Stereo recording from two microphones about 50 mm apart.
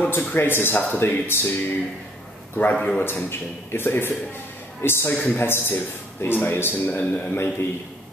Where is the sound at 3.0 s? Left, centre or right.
Left.